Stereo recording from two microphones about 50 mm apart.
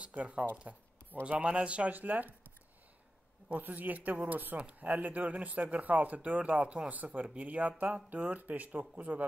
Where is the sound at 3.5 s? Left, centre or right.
Right.